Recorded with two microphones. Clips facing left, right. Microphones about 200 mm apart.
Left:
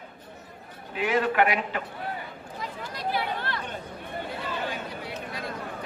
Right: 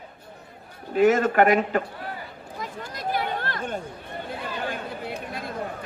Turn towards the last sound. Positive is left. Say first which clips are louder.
# right 3 dB
turn(degrees=-50)  # may be behind; listen again after turning